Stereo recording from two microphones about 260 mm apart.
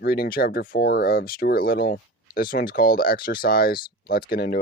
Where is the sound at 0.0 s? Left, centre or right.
Left.